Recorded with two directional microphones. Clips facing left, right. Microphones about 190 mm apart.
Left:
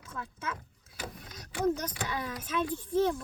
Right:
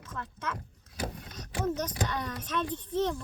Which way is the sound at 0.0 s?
10° left (ahead or behind).